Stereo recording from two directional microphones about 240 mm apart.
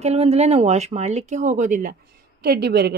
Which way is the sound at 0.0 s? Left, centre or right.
Right.